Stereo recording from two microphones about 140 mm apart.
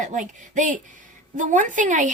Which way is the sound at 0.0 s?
60° right (ahead or behind).